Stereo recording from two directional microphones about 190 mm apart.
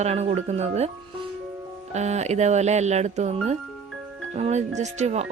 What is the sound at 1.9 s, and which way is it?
Speech, 35° right (ahead or behind).